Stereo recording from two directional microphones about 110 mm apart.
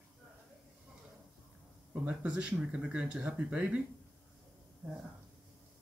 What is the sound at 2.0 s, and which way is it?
Speech, 10° right (ahead or behind).